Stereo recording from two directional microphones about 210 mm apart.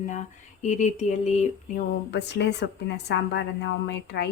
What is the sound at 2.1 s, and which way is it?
Speech, 55° left (ahead or behind).